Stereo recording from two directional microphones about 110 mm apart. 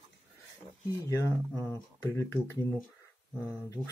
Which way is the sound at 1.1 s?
25° left (ahead or behind).